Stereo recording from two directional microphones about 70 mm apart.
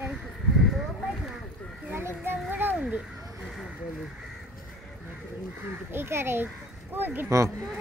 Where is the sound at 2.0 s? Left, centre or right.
Right.